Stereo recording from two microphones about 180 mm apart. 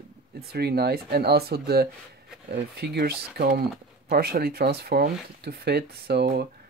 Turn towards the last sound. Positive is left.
turn(degrees=-65)  # may be behind; listen again after turning